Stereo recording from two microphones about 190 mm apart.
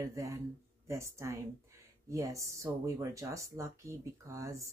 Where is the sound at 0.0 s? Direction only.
15° right (ahead or behind).